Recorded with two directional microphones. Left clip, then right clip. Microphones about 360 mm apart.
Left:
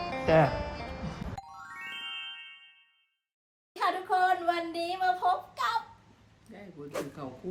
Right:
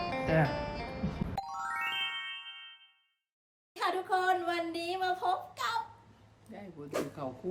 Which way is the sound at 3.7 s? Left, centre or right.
Centre.